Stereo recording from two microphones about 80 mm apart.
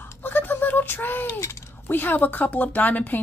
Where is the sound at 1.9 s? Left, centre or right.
Left.